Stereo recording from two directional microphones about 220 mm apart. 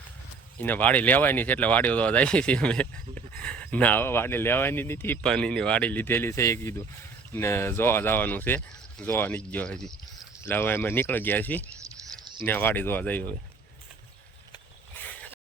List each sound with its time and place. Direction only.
0.6 s speech: 10° left (ahead or behind)
11.8 s a sound: 20° right (ahead or behind)
12.5 s speech: 10° left (ahead or behind)